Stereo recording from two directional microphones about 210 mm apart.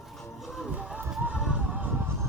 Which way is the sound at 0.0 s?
Centre (ahead or behind).